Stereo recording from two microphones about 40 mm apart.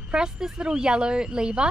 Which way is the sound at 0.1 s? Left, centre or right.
Centre.